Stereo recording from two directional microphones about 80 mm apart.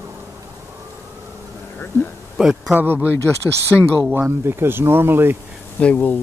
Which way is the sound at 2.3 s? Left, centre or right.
Centre.